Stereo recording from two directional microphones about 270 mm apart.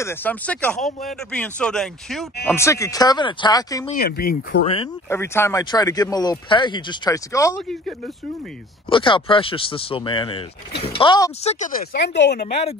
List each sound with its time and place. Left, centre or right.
0.0 s speech: centre
3.9 s speech: left
5.1 s speech: centre
8.9 s speech: centre
11.6 s speech: left